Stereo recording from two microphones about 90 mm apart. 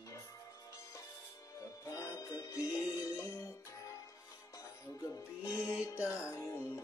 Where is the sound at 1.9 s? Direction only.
40° left (ahead or behind).